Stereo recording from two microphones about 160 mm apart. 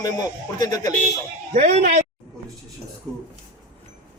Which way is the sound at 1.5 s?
50° right (ahead or behind).